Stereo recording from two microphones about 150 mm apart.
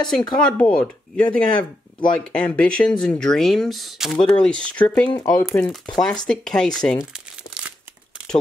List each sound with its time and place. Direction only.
0.4 s speech: 5° left (ahead or behind)
5.0 s speech: 30° left (ahead or behind)
5.6 s speech: 5° left (ahead or behind)